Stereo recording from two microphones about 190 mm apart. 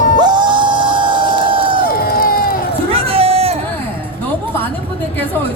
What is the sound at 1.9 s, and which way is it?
Crowd, 50° left (ahead or behind).